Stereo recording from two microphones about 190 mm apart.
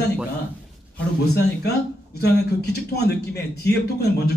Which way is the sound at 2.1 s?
55° left (ahead or behind).